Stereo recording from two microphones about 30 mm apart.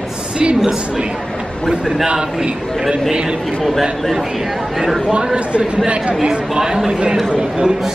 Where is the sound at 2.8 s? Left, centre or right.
Centre.